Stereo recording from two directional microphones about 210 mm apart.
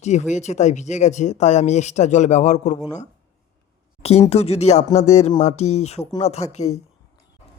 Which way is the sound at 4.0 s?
30° left (ahead or behind).